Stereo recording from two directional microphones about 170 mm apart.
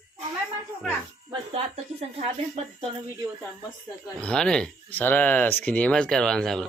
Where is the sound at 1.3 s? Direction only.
35° right (ahead or behind).